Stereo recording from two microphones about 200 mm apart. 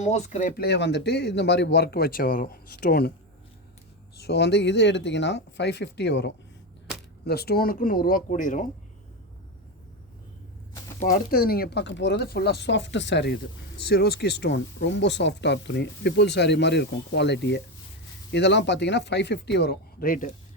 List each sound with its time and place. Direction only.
0.0 s speech: 35° left (ahead or behind)
4.2 s speech: 60° left (ahead or behind)
6.9 s a sound: 5° right (ahead or behind)
7.3 s speech: 50° left (ahead or behind)
11.0 s speech: 45° left (ahead or behind)